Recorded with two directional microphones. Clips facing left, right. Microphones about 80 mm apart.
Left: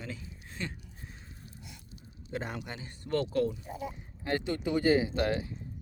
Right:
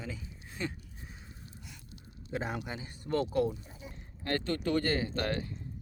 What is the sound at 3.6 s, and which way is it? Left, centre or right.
Speech, left.